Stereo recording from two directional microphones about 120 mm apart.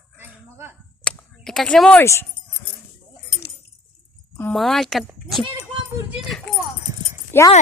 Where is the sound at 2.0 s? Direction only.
20° left (ahead or behind).